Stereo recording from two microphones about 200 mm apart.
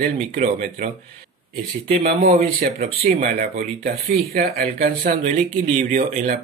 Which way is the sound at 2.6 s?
45° right (ahead or behind).